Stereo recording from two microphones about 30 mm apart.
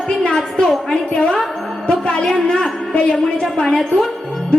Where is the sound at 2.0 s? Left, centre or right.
Left.